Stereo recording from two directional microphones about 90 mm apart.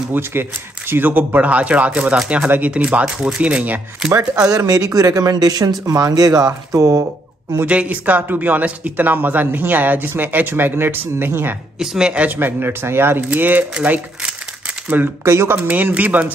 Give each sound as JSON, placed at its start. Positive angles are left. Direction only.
{"t": 0.1, "sound": "speech", "side_deg": -25}
{"t": 4.5, "sound": "speech", "side_deg": -45}
{"t": 7.6, "sound": "speech", "side_deg": -15}
{"t": 11.8, "sound": "speech", "side_deg": -5}
{"t": 14.9, "sound": "speech", "side_deg": -25}